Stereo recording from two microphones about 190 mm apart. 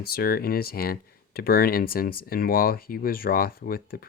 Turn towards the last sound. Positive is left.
turn(degrees=50)  # may be behind; listen again after turning